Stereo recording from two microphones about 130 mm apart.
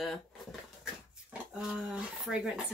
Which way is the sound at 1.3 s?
10° right (ahead or behind).